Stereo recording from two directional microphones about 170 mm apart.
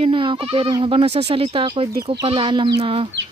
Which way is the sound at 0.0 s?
30° right (ahead or behind).